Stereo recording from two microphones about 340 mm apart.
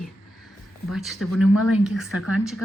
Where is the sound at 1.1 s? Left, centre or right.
Left.